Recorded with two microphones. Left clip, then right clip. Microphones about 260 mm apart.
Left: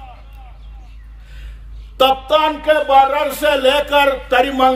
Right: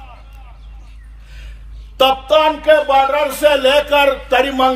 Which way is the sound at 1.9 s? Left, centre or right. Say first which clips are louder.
Right 1 dB; centre.